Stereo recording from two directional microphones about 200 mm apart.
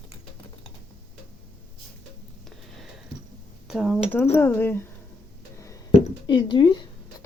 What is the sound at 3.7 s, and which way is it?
Speech, centre (ahead or behind).